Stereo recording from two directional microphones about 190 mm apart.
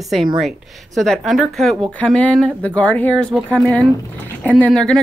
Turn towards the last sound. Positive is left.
turn(degrees=5)  # may be behind; listen again after turning